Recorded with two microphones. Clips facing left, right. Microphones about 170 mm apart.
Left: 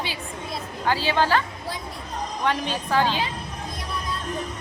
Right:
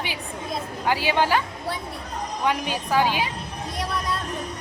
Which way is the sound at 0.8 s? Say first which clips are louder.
Even; 15° right (ahead or behind).